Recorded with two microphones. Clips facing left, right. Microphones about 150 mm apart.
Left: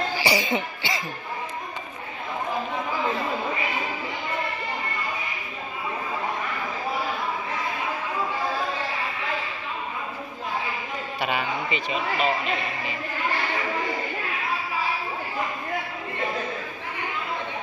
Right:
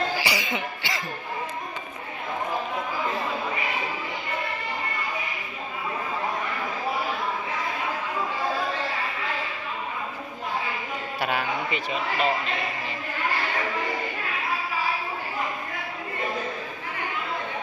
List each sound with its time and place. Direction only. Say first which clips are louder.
0.2 s cough: left 4 dB; 30° left (ahead or behind)
11.1 s speech: even; centre (ahead or behind)